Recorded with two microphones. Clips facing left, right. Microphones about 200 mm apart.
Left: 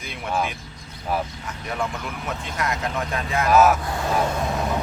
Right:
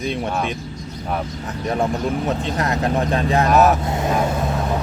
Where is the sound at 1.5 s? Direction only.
35° right (ahead or behind).